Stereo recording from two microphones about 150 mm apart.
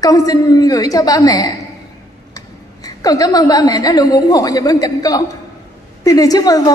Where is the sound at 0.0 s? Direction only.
25° left (ahead or behind).